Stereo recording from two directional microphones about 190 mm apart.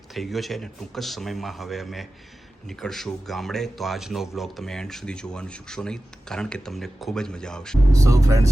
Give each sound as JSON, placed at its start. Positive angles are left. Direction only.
{"t": 0.1, "sound": "a man's voice", "side_deg": 0}
{"t": 7.9, "sound": "speech", "side_deg": -15}